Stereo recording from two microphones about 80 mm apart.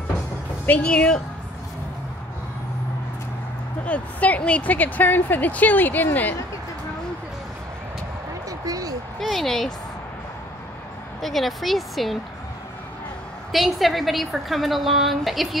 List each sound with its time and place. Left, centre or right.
0.7 s speech: centre
3.8 s speech: centre
8.5 s a sound: right
9.2 s a woman's voice: centre
11.1 s a woman's voice: centre
13.5 s a woman's voice: centre